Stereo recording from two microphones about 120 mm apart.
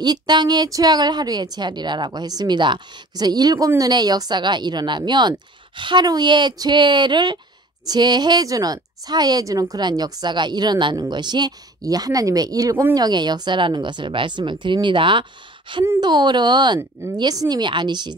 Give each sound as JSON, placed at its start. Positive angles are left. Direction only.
{"t": 0.0, "sound": "a woman's voice", "side_deg": -35}